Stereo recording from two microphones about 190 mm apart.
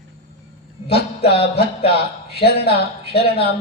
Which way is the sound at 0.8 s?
55° left (ahead or behind).